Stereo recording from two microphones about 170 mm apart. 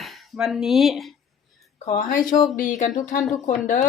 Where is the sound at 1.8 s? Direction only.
45° left (ahead or behind).